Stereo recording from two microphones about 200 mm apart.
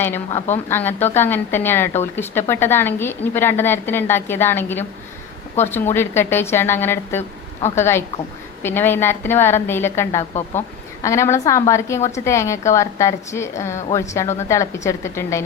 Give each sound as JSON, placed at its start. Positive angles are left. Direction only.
{"t": 0.3, "sound": "a woman's voice", "side_deg": 35}
{"t": 0.7, "sound": "a woman's voice", "side_deg": 10}